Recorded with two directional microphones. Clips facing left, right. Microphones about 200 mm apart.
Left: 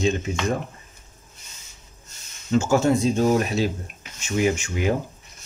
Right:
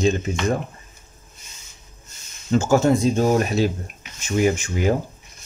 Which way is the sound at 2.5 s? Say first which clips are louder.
Right 1 dB; 45° right (ahead or behind).